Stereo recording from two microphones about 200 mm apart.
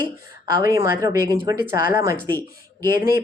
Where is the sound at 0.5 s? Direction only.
15° right (ahead or behind).